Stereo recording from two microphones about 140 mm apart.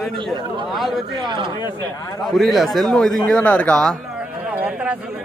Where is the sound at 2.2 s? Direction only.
Centre (ahead or behind).